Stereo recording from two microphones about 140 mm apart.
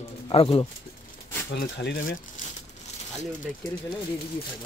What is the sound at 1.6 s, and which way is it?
Speech, 90° left.